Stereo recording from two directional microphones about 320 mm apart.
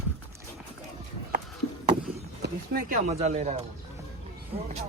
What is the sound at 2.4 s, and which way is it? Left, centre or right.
Speech, right.